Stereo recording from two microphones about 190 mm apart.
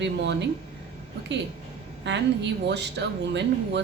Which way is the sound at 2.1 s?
65° right (ahead or behind).